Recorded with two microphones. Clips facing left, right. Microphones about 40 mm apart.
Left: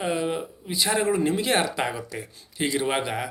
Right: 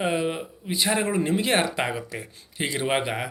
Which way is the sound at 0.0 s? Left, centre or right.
Right.